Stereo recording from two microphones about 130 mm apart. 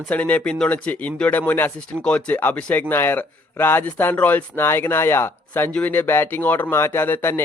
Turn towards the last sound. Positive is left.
turn(degrees=15)  # may be behind; listen again after turning